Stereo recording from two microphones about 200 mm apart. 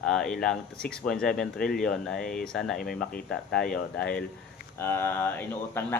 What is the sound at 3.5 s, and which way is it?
Speech, 45° left (ahead or behind).